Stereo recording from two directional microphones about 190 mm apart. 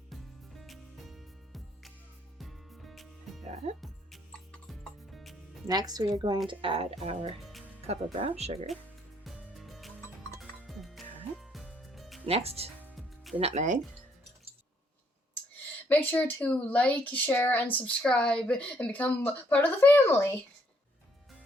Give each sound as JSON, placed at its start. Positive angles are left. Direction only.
{"t": 0.1, "sound": "music", "side_deg": 0}
{"t": 5.6, "sound": "a woman's voice", "side_deg": -20}
{"t": 7.4, "sound": "music", "side_deg": 0}
{"t": 7.9, "sound": "speech", "side_deg": -35}
{"t": 9.2, "sound": "music", "side_deg": 0}
{"t": 10.0, "sound": "music", "side_deg": 15}
{"t": 10.7, "sound": "music", "side_deg": 0}
{"t": 12.2, "sound": "speech", "side_deg": -30}
{"t": 12.8, "sound": "music", "side_deg": 0}
{"t": 13.4, "sound": "speech", "side_deg": -35}
{"t": 15.5, "sound": "speech", "side_deg": 10}